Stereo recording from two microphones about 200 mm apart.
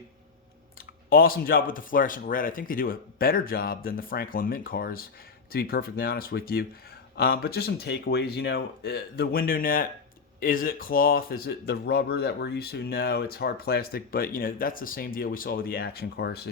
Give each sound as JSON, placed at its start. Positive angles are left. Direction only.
{"t": 1.1, "sound": "speech", "side_deg": 45}